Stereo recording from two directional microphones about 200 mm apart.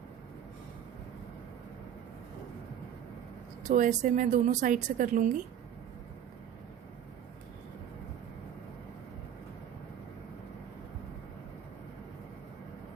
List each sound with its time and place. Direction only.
3.7 s speech: 40° right (ahead or behind)